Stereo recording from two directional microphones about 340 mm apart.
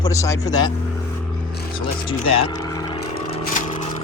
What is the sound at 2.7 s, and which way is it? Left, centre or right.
Scrape, centre.